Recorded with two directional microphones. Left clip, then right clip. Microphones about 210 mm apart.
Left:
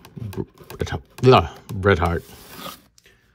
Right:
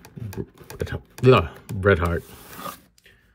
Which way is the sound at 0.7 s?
15° left (ahead or behind).